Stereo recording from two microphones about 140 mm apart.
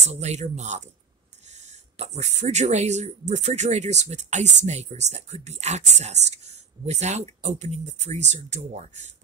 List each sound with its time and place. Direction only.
0.0 s speech: 55° right (ahead or behind)